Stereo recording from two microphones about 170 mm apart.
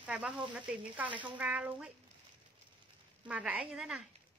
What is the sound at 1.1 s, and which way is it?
Speech, 30° right (ahead or behind).